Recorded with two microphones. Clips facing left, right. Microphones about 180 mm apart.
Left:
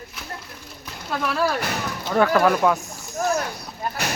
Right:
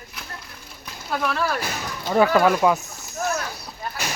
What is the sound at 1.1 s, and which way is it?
Speech, centre (ahead or behind).